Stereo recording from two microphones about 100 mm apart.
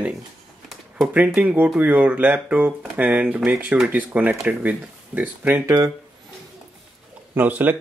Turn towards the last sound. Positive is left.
turn(degrees=-20)  # may be behind; listen again after turning